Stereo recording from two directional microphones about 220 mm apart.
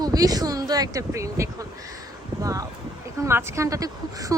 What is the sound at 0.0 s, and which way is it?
Speech, 15° right (ahead or behind).